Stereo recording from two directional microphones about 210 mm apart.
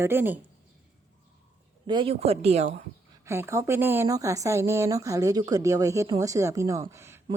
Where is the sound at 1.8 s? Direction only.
25° right (ahead or behind).